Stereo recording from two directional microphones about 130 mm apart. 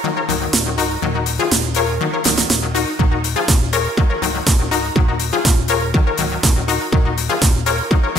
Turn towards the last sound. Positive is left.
turn(degrees=0)  # may be behind; listen again after turning